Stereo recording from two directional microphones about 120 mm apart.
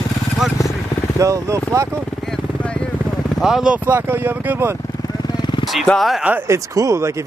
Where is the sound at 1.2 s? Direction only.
25° right (ahead or behind).